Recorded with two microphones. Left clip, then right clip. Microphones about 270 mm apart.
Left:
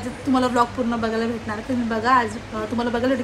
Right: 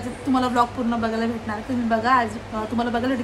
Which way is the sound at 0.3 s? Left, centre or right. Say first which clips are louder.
Left 1 dB; centre.